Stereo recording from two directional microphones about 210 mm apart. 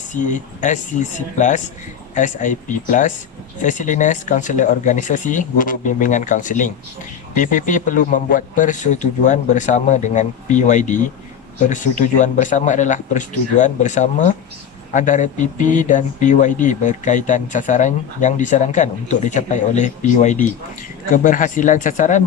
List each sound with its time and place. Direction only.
0.1 s speech: 35° left (ahead or behind)